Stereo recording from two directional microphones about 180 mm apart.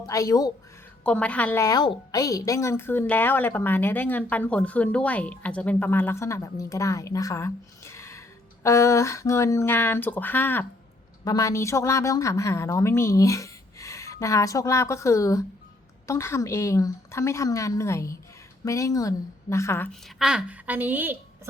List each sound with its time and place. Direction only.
0.0 s speech: 20° left (ahead or behind)
1.0 s a woman's voice: 5° left (ahead or behind)
1.6 s a woman's voice: 20° left (ahead or behind)
19.9 s a woman's voice: centre (ahead or behind)